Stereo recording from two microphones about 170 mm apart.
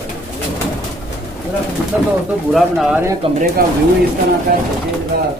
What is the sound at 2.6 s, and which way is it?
Speech, centre (ahead or behind).